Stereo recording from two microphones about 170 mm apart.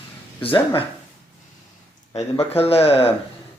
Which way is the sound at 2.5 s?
35° left (ahead or behind).